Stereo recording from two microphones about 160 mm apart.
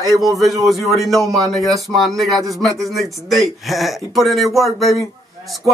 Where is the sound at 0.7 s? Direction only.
Centre (ahead or behind).